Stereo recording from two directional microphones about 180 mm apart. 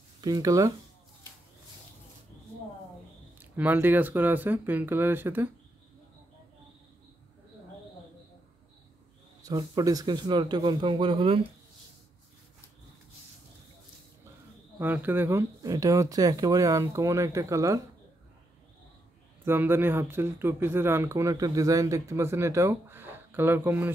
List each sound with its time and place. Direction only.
0.2 s a man's voice: 20° right (ahead or behind)
3.3 s speech: 10° right (ahead or behind)
9.4 s a man's voice: 20° right (ahead or behind)
14.8 s speech: 10° right (ahead or behind)
19.4 s speech: 10° right (ahead or behind)